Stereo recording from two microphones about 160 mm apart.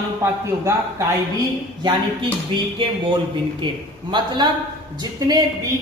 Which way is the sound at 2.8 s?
35° right (ahead or behind).